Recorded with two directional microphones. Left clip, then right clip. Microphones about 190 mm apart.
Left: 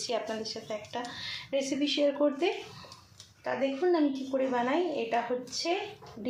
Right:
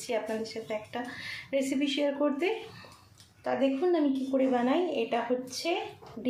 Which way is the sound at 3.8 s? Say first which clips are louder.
Even; 25° right (ahead or behind).